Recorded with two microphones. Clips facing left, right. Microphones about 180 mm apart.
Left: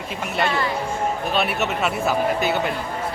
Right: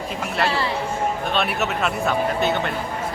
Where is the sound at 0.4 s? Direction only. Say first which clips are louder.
Even; 30° right (ahead or behind).